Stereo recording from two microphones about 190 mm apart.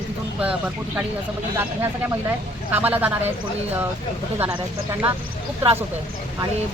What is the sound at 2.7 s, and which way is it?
Speech, 10° right (ahead or behind).